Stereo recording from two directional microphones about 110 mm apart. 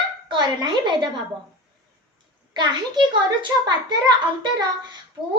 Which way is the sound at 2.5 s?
45° right (ahead or behind).